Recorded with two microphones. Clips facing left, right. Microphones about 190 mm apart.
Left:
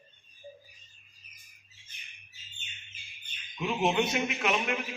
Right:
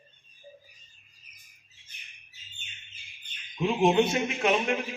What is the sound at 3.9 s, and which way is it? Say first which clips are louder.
Speech: right 4 dB; 25° right (ahead or behind).